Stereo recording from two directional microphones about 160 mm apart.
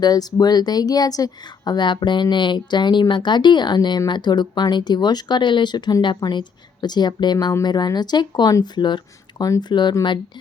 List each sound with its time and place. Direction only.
0.0 s speech: 25° left (ahead or behind)